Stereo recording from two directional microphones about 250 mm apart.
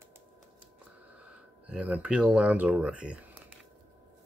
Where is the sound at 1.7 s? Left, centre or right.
Centre.